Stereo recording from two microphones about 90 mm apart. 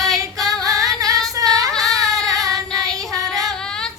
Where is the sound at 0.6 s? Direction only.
40° right (ahead or behind).